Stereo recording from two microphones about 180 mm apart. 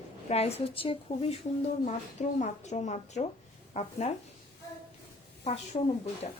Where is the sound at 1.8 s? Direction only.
40° left (ahead or behind).